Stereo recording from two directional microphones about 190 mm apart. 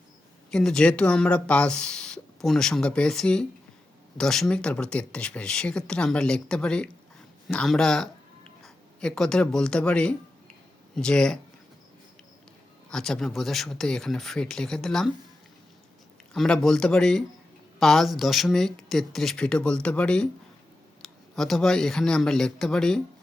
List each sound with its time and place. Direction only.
0.5 s speech: 5° left (ahead or behind)
12.9 s speech: 5° left (ahead or behind)
16.3 s speech: centre (ahead or behind)